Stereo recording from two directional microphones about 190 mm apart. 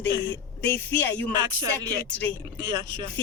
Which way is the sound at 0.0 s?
65° left (ahead or behind).